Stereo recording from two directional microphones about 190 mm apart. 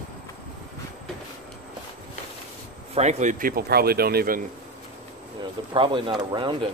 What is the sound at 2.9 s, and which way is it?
A man's voice, 40° right (ahead or behind).